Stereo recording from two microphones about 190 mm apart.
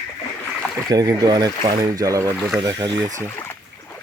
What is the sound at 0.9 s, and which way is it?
Speech, 20° right (ahead or behind).